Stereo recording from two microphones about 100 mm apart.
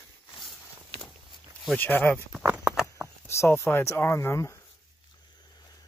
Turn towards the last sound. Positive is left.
turn(degrees=30)  # may be behind; listen again after turning